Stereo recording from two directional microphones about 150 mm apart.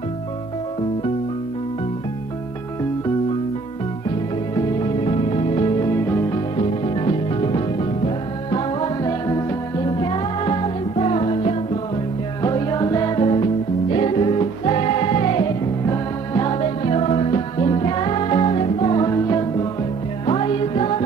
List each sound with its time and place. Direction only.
4.6 s music: 30° left (ahead or behind)
6.5 s music: 35° left (ahead or behind)
12.4 s music: 25° left (ahead or behind)
15.8 s music: 20° left (ahead or behind)
20.2 s music: 40° left (ahead or behind)